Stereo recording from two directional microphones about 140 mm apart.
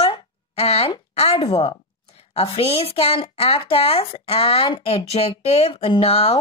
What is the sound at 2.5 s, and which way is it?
A woman's voice, 45° left (ahead or behind).